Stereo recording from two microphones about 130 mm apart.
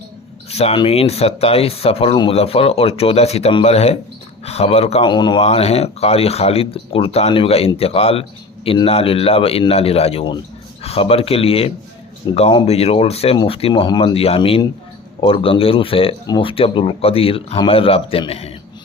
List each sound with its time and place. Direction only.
0.5 s speech: 55° left (ahead or behind)
5.0 s speech: 35° left (ahead or behind)
5.4 s speech: 50° left (ahead or behind)